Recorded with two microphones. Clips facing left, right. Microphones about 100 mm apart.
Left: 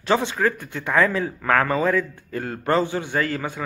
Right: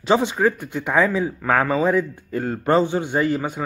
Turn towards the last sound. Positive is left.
turn(degrees=-20)  # may be behind; listen again after turning